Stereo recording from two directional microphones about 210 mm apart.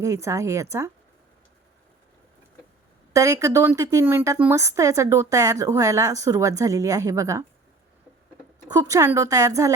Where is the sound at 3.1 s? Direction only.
15° right (ahead or behind).